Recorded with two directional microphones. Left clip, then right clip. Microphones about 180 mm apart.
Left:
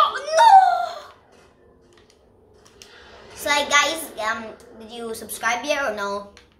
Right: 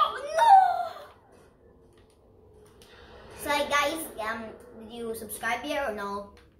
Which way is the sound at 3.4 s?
40° left (ahead or behind).